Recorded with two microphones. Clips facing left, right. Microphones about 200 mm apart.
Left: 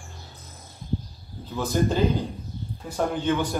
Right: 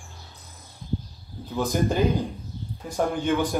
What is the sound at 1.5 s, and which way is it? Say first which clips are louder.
Speech: even; 15° right (ahead or behind).